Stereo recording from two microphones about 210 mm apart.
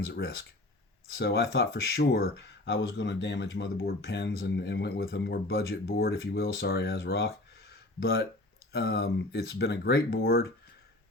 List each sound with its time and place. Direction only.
0.1 s speech: 55° left (ahead or behind)
7.7 s a sound: 50° left (ahead or behind)
8.7 s speech: 50° left (ahead or behind)